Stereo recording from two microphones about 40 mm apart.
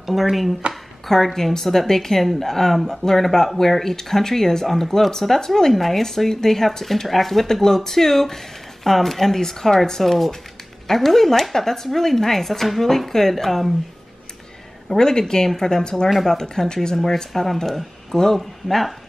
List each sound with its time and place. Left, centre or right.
0.0 s speech: centre
14.9 s speech: centre